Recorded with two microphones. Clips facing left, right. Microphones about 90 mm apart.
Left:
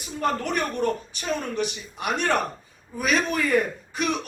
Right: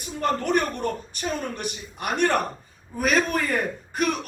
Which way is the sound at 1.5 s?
50° right (ahead or behind).